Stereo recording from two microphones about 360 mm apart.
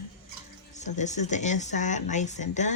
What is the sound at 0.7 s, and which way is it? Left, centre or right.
Speech, centre.